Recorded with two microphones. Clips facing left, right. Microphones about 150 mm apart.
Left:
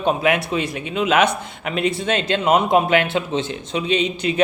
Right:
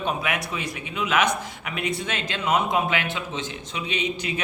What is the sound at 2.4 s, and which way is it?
Speech, 60° left (ahead or behind).